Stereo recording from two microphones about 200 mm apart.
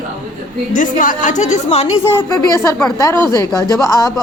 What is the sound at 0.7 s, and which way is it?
A woman's voice, 40° left (ahead or behind).